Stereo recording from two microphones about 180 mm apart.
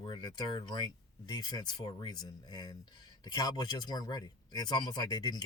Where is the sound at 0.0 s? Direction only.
25° left (ahead or behind).